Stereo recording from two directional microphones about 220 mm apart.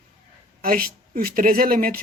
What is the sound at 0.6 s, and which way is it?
Speech, 40° right (ahead or behind).